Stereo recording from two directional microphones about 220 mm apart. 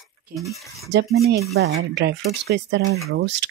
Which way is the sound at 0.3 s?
40° right (ahead or behind).